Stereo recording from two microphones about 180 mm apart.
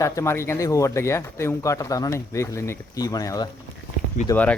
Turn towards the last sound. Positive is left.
turn(degrees=10)  # may be behind; listen again after turning